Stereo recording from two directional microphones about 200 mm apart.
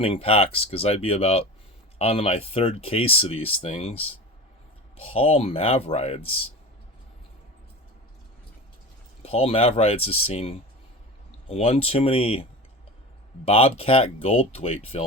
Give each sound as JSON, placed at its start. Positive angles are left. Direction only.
{"t": 0.0, "sound": "speech", "side_deg": 30}
{"t": 9.2, "sound": "speech", "side_deg": 30}